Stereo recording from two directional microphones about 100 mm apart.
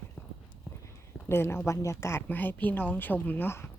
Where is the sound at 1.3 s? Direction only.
25° left (ahead or behind).